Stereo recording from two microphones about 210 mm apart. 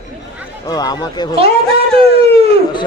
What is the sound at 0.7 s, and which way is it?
Speech, 20° left (ahead or behind).